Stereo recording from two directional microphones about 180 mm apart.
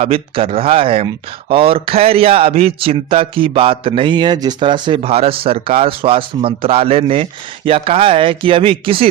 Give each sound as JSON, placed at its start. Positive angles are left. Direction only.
{"t": 0.0, "sound": "speech", "side_deg": -30}